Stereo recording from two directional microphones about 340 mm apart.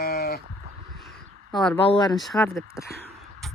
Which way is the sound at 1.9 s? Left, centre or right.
Centre.